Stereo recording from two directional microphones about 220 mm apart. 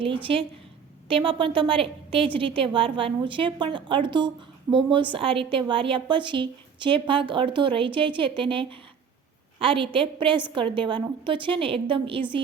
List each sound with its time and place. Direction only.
0.0 s a woman's voice: 25° right (ahead or behind)